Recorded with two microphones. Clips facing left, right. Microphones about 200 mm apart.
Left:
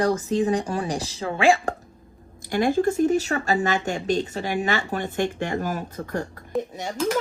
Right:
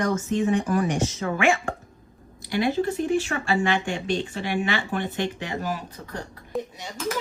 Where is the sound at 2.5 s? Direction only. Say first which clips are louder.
Left 3 dB; 45° left (ahead or behind).